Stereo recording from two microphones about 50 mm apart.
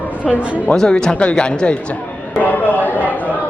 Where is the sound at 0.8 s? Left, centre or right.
Centre.